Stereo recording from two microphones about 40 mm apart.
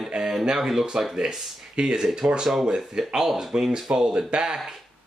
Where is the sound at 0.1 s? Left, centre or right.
Centre.